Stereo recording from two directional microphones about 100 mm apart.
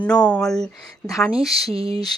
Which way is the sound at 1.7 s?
70° right (ahead or behind).